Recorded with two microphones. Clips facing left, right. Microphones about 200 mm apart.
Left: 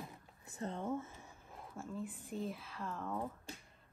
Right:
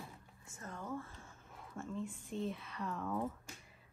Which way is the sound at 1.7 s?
5° left (ahead or behind).